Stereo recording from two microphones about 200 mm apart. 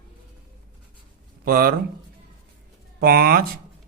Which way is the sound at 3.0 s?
50° right (ahead or behind).